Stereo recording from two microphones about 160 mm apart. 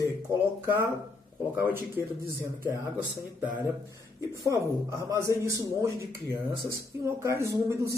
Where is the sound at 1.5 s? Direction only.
10° right (ahead or behind).